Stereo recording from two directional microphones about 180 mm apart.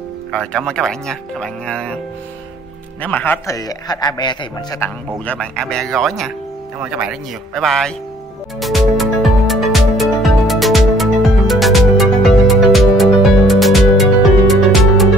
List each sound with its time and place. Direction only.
0.3 s speech: centre (ahead or behind)
3.0 s a man's voice: 10° left (ahead or behind); by 4.7 s 25° left (ahead or behind)
4.7 s speech: 10° left (ahead or behind)
8.5 s music: centre (ahead or behind)